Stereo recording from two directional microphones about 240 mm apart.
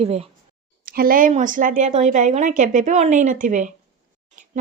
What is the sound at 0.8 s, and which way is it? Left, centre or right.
A woman's voice, right.